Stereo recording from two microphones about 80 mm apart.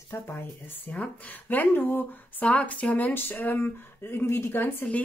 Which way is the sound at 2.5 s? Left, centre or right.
Centre.